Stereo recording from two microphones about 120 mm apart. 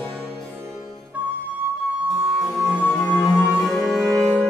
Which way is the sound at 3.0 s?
5° left (ahead or behind).